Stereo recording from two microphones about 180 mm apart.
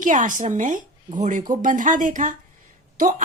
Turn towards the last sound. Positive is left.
turn(degrees=-45)  # may be behind; listen again after turning